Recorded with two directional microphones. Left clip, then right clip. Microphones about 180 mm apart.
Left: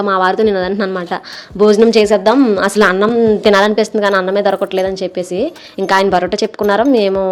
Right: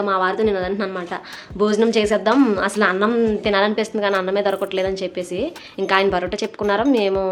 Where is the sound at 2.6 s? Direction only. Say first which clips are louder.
Left 7 dB; 45° left (ahead or behind).